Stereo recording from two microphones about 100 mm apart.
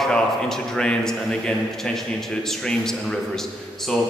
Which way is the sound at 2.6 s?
5° left (ahead or behind).